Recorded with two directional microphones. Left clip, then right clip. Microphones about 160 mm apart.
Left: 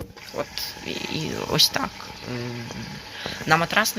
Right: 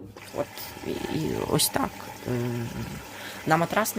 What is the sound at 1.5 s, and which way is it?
Speech, 20° right (ahead or behind).